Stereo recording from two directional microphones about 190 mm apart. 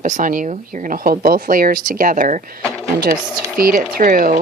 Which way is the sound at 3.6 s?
50° right (ahead or behind).